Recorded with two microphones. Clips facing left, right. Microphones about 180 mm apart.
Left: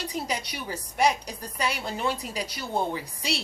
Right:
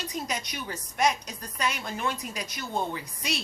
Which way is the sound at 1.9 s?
30° left (ahead or behind).